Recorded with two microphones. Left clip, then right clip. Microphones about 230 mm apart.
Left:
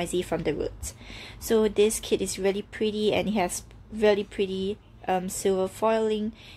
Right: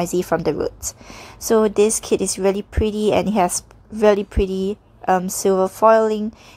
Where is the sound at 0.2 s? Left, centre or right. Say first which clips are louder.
Right 8 dB; right.